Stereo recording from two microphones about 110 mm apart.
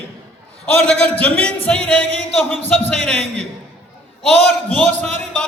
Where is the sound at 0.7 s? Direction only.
15° left (ahead or behind).